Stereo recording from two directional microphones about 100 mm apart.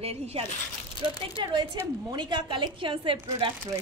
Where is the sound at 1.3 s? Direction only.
45° right (ahead or behind).